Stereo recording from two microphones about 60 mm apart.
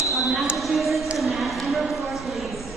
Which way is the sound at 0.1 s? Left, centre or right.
Centre.